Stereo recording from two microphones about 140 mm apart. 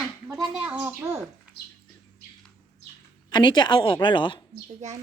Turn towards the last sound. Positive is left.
turn(degrees=-55)  # may be behind; listen again after turning